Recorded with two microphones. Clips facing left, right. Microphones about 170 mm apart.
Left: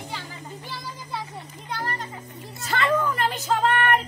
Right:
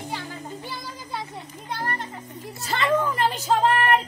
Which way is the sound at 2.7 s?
30° right (ahead or behind).